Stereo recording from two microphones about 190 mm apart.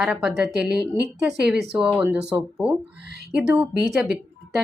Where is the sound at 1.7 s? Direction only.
5° right (ahead or behind).